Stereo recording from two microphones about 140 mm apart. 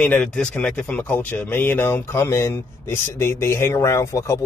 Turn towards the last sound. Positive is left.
turn(degrees=20)  # may be behind; listen again after turning